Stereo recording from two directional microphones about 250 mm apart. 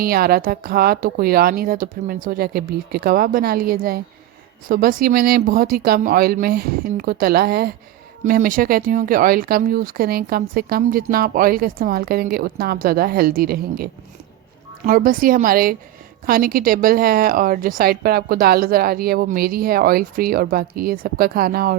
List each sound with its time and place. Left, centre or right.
0.0 s speech: right
14.8 s speech: right